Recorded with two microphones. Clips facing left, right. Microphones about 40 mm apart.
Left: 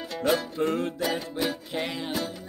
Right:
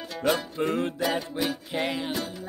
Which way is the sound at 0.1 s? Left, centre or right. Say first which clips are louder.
Even; centre.